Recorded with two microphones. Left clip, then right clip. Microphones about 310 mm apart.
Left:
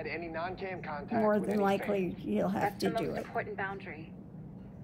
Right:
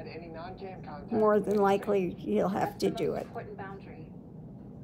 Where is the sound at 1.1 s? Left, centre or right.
Centre.